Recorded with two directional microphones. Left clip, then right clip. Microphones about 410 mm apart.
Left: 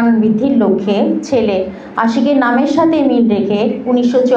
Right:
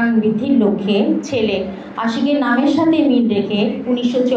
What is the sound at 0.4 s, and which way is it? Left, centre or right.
A woman's voice, left.